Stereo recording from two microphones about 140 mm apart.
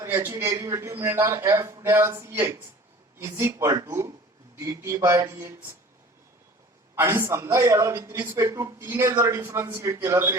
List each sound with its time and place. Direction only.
0.0 s a man's voice: 20° right (ahead or behind)
6.9 s a man's voice: 20° right (ahead or behind)